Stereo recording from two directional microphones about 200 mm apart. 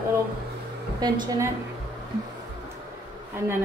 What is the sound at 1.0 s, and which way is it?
Speech, 20° right (ahead or behind).